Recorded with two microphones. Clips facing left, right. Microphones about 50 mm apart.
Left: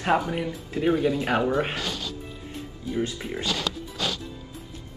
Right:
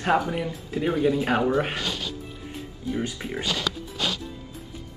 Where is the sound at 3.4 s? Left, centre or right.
Right.